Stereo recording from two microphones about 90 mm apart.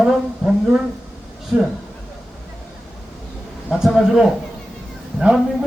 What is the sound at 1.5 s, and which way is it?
Speech, 15° right (ahead or behind).